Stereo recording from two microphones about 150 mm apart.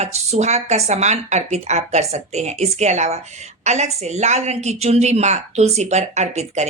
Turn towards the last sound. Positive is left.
turn(degrees=-50)  # may be behind; listen again after turning